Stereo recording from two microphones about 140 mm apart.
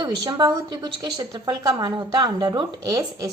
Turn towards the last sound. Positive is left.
turn(degrees=-25)  # may be behind; listen again after turning